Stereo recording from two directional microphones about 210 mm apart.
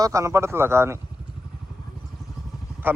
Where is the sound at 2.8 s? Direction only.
10° right (ahead or behind).